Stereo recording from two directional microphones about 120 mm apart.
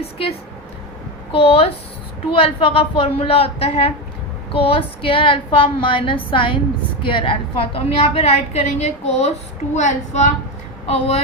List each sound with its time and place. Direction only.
0.0 s a woman's voice: 55° left (ahead or behind)
9.7 s a woman's voice: 80° left
10.8 s a woman's voice: 60° left (ahead or behind)